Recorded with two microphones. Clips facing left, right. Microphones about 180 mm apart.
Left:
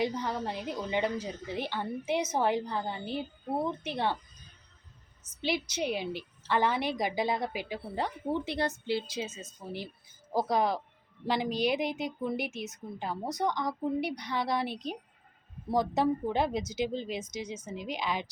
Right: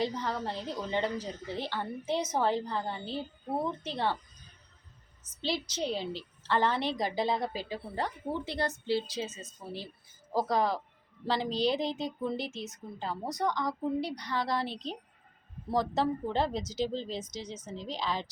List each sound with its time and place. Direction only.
0.0 s a woman's voice: 15° left (ahead or behind)
5.4 s a woman's voice: 15° left (ahead or behind)